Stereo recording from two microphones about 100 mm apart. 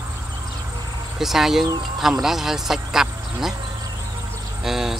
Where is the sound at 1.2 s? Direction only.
5° right (ahead or behind).